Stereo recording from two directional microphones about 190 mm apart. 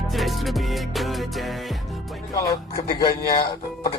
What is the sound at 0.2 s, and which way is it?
Music, centre (ahead or behind).